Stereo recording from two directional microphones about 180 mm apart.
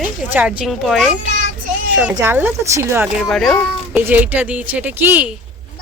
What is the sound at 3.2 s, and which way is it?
Speech, centre (ahead or behind).